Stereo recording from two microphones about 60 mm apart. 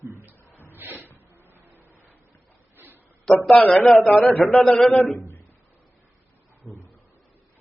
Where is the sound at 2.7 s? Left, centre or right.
Right.